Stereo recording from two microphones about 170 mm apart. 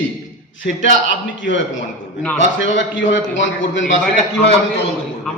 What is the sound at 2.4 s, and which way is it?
A man's voice, 90° left.